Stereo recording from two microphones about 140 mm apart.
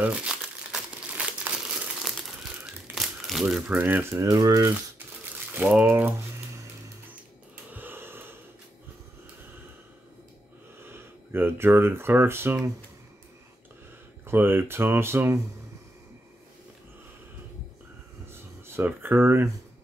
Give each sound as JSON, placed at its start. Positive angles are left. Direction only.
{"t": 0.0, "sound": "crumpling", "side_deg": -5}
{"t": 5.7, "sound": "speech", "side_deg": -10}
{"t": 7.7, "sound": "wheeze", "side_deg": -15}
{"t": 10.8, "sound": "speech", "side_deg": -15}
{"t": 14.2, "sound": "speech", "side_deg": -15}
{"t": 18.3, "sound": "a sound", "side_deg": -15}